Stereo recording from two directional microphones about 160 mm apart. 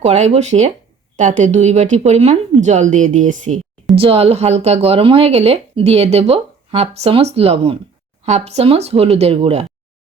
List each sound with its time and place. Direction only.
0.0 s speech: 40° right (ahead or behind)
3.9 s speech: 35° right (ahead or behind)